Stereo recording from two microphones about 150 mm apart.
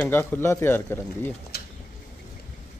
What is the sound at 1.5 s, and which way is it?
Pigeon, 90° left.